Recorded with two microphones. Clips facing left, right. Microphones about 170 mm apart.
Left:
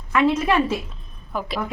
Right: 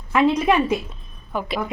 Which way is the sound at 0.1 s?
20° right (ahead or behind).